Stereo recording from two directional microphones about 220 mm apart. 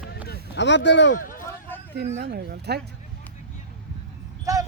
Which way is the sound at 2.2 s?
45° right (ahead or behind).